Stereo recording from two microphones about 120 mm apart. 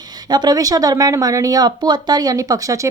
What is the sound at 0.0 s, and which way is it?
A woman's voice, 35° right (ahead or behind).